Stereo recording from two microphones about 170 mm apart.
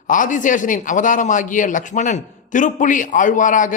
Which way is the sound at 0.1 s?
50° left (ahead or behind).